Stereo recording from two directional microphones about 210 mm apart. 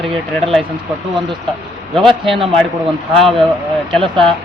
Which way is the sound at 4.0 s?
Centre (ahead or behind).